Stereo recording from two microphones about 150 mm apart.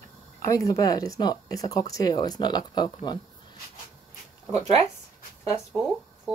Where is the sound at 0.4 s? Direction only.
20° left (ahead or behind).